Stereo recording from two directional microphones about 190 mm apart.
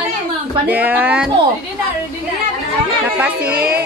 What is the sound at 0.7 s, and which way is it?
Speech, 10° right (ahead or behind).